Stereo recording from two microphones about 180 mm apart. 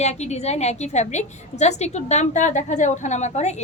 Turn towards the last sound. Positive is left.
turn(degrees=40)  # may be behind; listen again after turning